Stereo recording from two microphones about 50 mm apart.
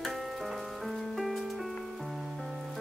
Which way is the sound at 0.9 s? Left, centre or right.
Centre.